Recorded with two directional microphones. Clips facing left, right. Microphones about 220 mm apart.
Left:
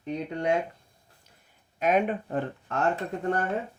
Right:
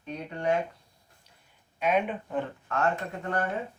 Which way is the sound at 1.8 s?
45° left (ahead or behind).